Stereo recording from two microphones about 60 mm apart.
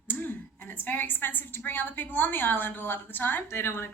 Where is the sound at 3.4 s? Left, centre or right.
Left.